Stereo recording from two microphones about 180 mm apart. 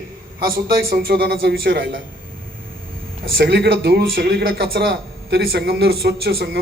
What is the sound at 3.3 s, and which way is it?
Speech, 60° right (ahead or behind).